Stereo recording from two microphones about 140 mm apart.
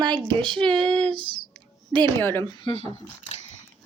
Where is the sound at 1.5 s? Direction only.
35° right (ahead or behind).